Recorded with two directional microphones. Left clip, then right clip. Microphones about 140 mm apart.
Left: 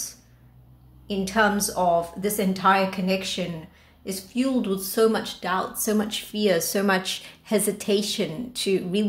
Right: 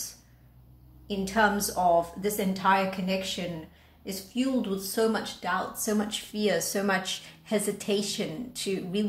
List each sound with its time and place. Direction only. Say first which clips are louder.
1.0 s speech: left 3 dB; 30° left (ahead or behind)